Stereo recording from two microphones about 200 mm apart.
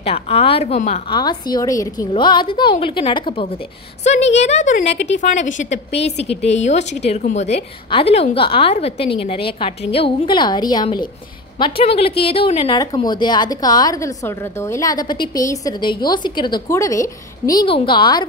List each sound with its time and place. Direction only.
0.0 s a woman's voice: 30° left (ahead or behind)
1.2 s a woman's voice: 20° left (ahead or behind)